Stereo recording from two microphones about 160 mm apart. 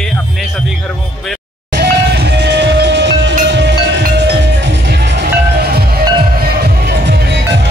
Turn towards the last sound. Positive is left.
turn(degrees=-90)